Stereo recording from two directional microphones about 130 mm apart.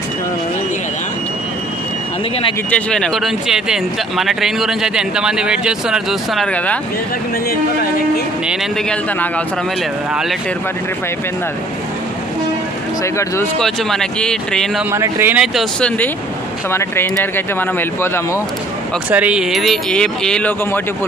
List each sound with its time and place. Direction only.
2.7 s speech: 5° left (ahead or behind)
6.5 s speech: 10° left (ahead or behind)
13.0 s speech: 20° left (ahead or behind)
13.6 s speech: 5° left (ahead or behind)
14.9 s a man's voice: 20° right (ahead or behind)
15.3 s speech: 5° right (ahead or behind)
16.7 s speech: 15° left (ahead or behind)
19.0 s speech: 10° right (ahead or behind); by 20.8 s 10° left (ahead or behind)